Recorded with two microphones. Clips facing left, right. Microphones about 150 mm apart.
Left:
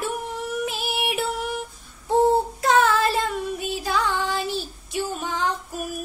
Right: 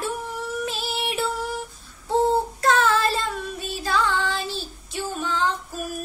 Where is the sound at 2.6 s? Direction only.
15° left (ahead or behind).